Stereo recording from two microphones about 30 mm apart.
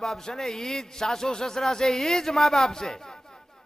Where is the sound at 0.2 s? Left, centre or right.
Centre.